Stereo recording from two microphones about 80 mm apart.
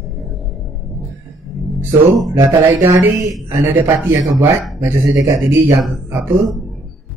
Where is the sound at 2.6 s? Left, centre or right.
Right.